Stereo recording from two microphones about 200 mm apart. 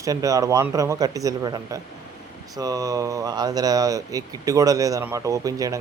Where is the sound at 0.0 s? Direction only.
15° right (ahead or behind).